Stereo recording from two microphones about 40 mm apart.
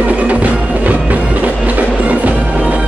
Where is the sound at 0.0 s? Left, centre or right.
Right.